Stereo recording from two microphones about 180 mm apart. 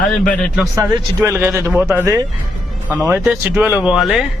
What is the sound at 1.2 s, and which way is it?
Speech, 10° right (ahead or behind).